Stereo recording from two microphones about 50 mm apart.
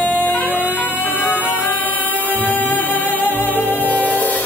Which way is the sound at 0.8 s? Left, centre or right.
Left.